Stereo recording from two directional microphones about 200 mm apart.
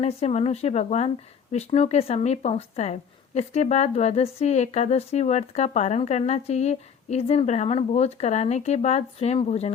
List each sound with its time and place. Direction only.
0.0 s a woman's voice: 30° left (ahead or behind)